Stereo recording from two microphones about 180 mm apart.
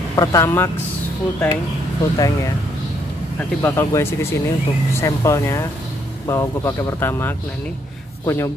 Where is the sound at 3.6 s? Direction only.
15° left (ahead or behind).